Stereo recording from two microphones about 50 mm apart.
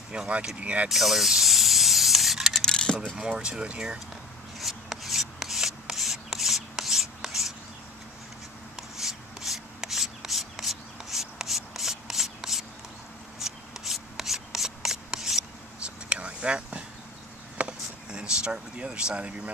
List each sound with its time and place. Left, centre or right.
0.1 s speech: right
0.8 s spray: centre
2.6 s coin: centre
3.2 s speech: centre
4.6 s rub: centre
8.7 s a sound: centre
13.4 s rub: centre
15.8 s whispering: right
17.6 s a sound: right